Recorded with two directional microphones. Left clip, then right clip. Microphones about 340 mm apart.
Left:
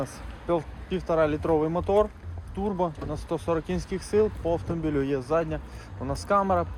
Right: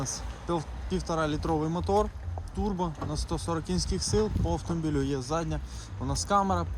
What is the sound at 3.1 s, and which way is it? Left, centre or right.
Speech, centre.